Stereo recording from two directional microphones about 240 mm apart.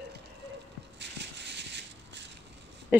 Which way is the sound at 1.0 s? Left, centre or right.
Right.